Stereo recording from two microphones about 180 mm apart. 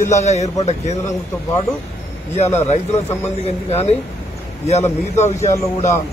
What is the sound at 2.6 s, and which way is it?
A man's voice, 40° left (ahead or behind).